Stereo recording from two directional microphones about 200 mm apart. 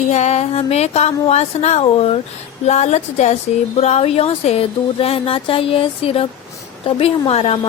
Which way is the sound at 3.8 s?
30° left (ahead or behind).